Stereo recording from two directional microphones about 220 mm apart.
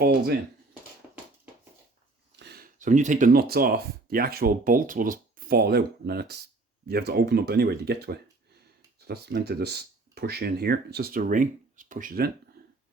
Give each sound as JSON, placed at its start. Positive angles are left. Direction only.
{"t": 0.0, "sound": "speech", "side_deg": -45}
{"t": 1.0, "sound": "a sound", "side_deg": -5}
{"t": 2.4, "sound": "speech", "side_deg": -45}